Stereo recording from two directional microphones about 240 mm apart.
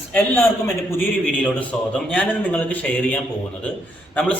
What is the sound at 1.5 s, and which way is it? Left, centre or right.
A man's voice, centre.